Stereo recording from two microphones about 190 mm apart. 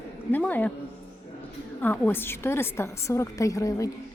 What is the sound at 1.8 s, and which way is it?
A woman's voice, 10° left (ahead or behind).